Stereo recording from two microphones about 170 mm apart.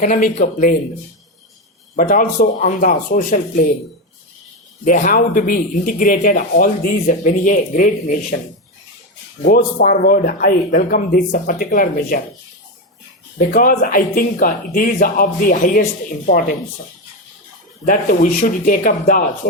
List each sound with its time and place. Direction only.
0.0 s speech: 45° left (ahead or behind)
2.0 s speech: 50° left (ahead or behind)
4.9 s speech: 55° left (ahead or behind)
9.4 s speech: 65° left (ahead or behind)
13.4 s speech: 50° left (ahead or behind)
17.8 s speech: 50° left (ahead or behind)